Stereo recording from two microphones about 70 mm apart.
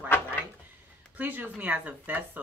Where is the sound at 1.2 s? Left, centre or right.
Right.